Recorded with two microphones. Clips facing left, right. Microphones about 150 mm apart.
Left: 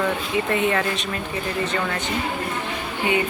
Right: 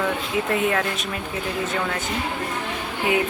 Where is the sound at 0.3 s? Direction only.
Centre (ahead or behind).